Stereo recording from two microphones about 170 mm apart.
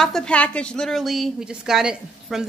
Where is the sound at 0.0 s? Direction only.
5° left (ahead or behind).